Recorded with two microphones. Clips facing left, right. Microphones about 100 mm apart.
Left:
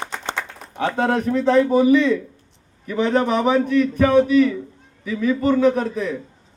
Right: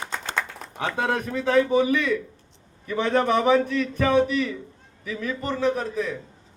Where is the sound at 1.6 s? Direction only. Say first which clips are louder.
Left 5 dB; 10° left (ahead or behind).